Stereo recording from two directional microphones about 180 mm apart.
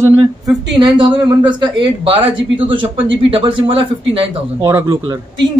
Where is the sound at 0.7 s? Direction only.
25° right (ahead or behind).